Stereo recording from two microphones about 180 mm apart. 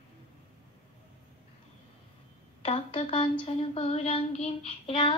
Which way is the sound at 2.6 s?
30° left (ahead or behind).